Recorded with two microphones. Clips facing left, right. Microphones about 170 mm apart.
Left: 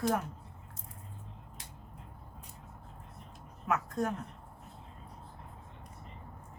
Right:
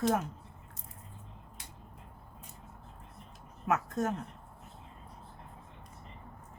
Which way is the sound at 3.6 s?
25° right (ahead or behind).